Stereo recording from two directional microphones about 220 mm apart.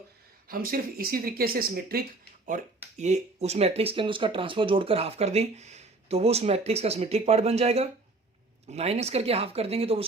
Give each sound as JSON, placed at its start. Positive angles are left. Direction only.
{"t": 0.4, "sound": "speech", "side_deg": -40}
{"t": 3.0, "sound": "speech", "side_deg": -30}